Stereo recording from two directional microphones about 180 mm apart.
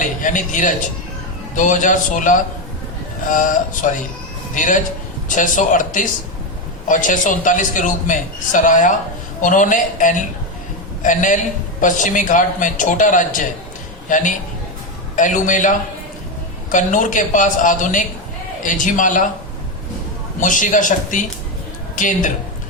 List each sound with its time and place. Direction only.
0.0 s speech: 45° left (ahead or behind)
15.1 s a man's voice: 45° left (ahead or behind)
16.7 s speech: 45° left (ahead or behind)
20.4 s speech: 45° left (ahead or behind)